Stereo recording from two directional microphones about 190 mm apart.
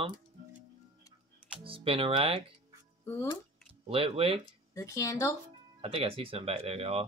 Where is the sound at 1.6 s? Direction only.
30° right (ahead or behind).